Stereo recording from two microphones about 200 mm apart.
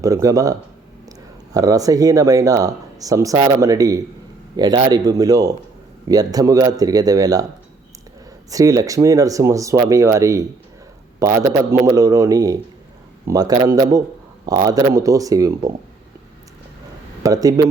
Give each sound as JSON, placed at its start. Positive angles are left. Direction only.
{"t": 0.0, "sound": "speech", "side_deg": -15}
{"t": 1.5, "sound": "speech", "side_deg": -15}
{"t": 8.4, "sound": "speech", "side_deg": -15}
{"t": 17.2, "sound": "speech", "side_deg": -20}